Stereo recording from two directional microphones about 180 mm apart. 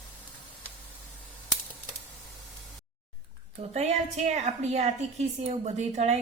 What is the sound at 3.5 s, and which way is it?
A woman's voice, 35° right (ahead or behind).